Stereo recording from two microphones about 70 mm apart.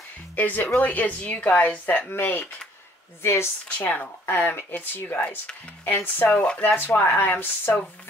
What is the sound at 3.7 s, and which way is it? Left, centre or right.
Speech, left.